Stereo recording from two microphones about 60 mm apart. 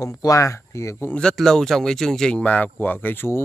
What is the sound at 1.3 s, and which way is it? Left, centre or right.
Speech, centre.